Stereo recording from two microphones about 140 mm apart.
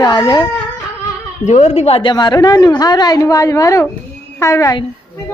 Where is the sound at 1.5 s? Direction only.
50° left (ahead or behind); by 4.8 s 20° left (ahead or behind).